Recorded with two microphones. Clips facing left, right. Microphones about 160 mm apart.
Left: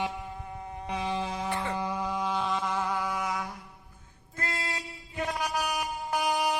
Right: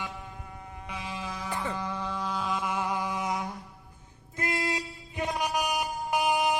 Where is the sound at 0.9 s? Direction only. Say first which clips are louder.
Left 6 dB; 35° left (ahead or behind).